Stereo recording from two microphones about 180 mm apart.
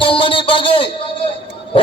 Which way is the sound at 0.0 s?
30° left (ahead or behind).